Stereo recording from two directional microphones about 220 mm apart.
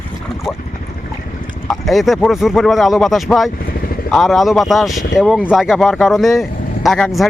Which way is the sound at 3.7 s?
40° left (ahead or behind).